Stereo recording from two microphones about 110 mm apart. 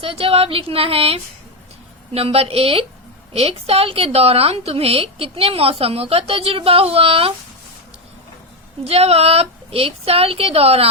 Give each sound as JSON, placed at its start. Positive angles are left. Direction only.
{"t": 0.0, "sound": "a woman's voice", "side_deg": -60}
{"t": 8.8, "sound": "a woman's voice", "side_deg": -65}